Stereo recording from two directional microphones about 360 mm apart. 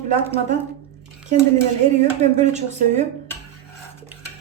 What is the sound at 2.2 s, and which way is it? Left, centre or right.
Speech, centre.